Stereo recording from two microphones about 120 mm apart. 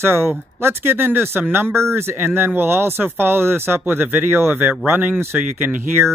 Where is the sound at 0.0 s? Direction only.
20° right (ahead or behind).